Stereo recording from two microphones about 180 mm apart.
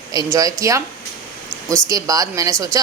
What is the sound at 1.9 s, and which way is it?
Speech, 20° right (ahead or behind).